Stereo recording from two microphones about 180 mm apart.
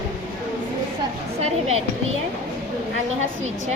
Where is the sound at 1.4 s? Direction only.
35° right (ahead or behind).